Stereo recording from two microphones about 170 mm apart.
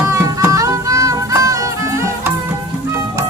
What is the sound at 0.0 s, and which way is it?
Music, 15° right (ahead or behind).